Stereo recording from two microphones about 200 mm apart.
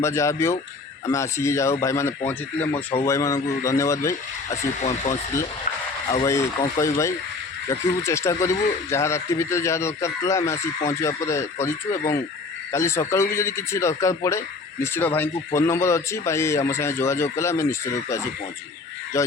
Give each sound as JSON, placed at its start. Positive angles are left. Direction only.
{"t": 0.0, "sound": "speech", "side_deg": 15}
{"t": 4.8, "sound": "speech", "side_deg": 35}
{"t": 6.1, "sound": "speech", "side_deg": 15}